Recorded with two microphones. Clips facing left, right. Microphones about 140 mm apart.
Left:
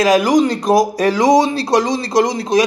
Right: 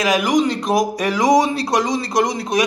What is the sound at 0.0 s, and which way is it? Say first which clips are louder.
A man's voice: left 4 dB; 35° left (ahead or behind).